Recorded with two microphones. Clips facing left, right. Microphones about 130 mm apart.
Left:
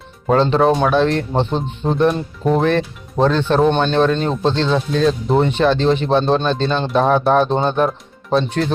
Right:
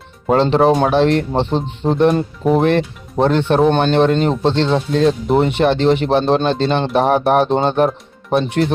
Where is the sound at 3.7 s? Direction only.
50° right (ahead or behind).